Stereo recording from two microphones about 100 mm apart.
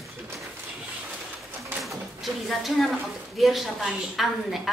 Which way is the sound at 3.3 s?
Centre (ahead or behind).